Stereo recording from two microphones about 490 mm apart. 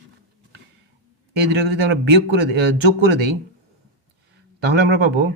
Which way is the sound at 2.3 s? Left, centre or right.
Centre.